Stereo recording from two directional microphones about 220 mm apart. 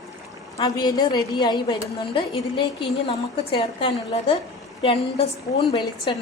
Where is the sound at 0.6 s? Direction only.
20° left (ahead or behind).